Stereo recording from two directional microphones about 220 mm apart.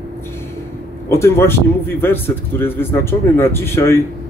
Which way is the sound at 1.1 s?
10° left (ahead or behind).